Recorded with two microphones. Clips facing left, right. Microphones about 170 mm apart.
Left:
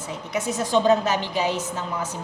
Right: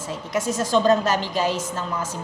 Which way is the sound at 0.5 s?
15° left (ahead or behind).